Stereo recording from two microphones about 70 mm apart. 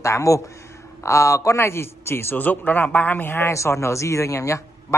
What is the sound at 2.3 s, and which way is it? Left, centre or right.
Speech, left.